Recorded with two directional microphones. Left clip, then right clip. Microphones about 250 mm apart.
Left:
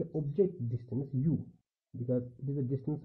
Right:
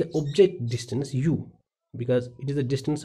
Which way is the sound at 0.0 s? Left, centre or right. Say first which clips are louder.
Right 11 dB; centre.